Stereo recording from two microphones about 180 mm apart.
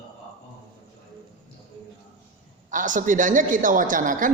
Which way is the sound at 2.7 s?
45° right (ahead or behind).